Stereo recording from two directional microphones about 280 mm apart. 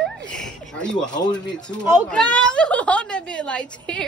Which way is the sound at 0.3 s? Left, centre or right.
Centre.